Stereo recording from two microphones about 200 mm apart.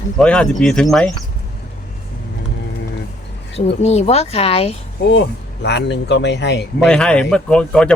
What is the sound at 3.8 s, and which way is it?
Speech, 30° left (ahead or behind).